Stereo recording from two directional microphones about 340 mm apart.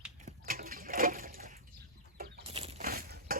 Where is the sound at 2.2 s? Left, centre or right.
Centre.